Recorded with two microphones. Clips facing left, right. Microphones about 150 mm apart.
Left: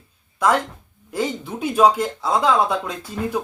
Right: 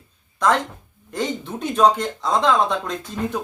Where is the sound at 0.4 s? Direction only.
10° left (ahead or behind).